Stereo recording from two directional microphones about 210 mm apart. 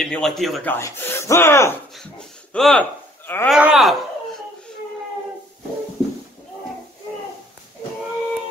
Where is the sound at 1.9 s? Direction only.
Centre (ahead or behind).